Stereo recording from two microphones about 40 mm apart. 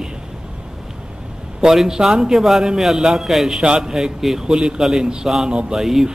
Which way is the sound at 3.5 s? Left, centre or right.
Centre.